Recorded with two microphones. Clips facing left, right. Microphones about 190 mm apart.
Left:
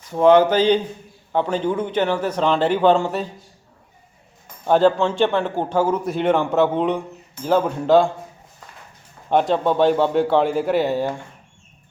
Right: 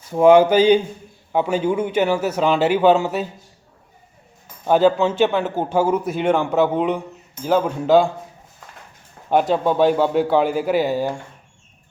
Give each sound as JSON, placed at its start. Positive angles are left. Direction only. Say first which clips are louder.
{"t": 0.1, "sound": "speech", "louder": "right 2 dB", "side_deg": -10}
{"t": 4.6, "sound": "a man's voice", "louder": "right 1 dB", "side_deg": -5}
{"t": 9.3, "sound": "a man's voice", "louder": "even", "side_deg": -5}